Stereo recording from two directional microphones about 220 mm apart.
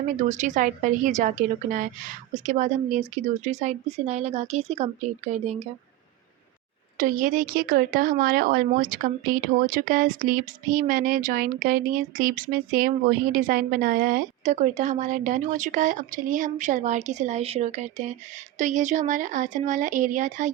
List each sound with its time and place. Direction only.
0.3 s speech: 35° right (ahead or behind)
6.9 s speech: 40° right (ahead or behind)